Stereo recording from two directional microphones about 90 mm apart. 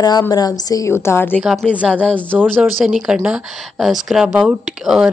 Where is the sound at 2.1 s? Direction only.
20° right (ahead or behind).